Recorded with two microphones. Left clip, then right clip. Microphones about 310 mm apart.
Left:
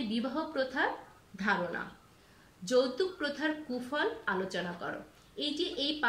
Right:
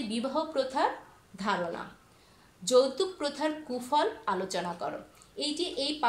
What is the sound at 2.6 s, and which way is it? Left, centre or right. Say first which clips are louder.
A woman's voice: right 4 dB; centre.